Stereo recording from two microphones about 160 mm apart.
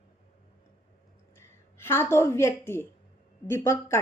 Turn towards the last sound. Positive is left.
turn(degrees=15)  # may be behind; listen again after turning